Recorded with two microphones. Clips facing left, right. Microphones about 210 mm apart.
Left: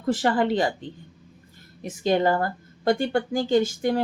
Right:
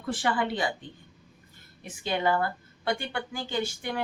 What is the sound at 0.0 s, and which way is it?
Speech, 40° left (ahead or behind).